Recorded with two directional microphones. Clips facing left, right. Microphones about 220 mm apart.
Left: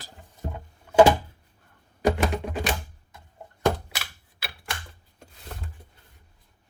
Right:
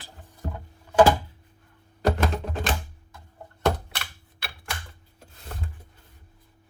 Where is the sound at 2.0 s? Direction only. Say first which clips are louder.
Left 1 dB; 10° left (ahead or behind).